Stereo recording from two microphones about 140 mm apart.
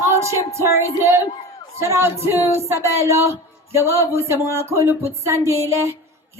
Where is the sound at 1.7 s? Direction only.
20° right (ahead or behind).